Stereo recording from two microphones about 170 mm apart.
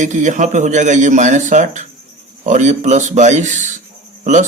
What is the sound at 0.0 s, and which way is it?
Speech, 45° right (ahead or behind).